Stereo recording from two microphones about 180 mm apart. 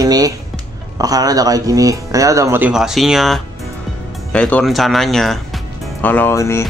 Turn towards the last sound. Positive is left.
turn(degrees=15)  # may be behind; listen again after turning